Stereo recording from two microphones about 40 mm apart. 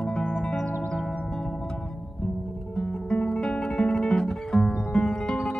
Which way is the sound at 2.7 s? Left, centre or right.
Left.